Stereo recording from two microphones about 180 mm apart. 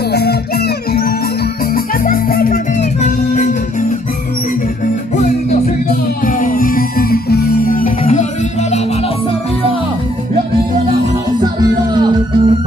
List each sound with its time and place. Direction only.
0.1 s music: 65° left (ahead or behind); by 3.5 s 45° left (ahead or behind)
6.2 s music: 50° left (ahead or behind)
11.6 s music: 25° right (ahead or behind)